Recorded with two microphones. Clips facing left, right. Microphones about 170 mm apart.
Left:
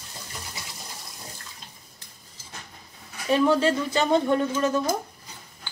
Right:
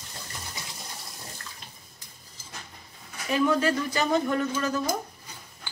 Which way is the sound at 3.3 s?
30° left (ahead or behind).